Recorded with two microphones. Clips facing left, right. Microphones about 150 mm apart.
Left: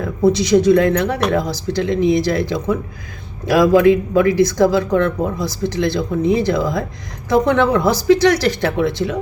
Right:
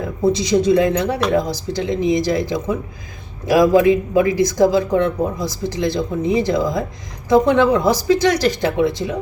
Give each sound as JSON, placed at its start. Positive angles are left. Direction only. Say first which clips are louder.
{"t": 0.3, "sound": "speech", "louder": "left 3 dB", "side_deg": -20}